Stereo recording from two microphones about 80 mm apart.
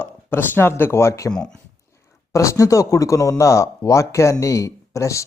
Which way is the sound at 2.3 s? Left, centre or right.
Left.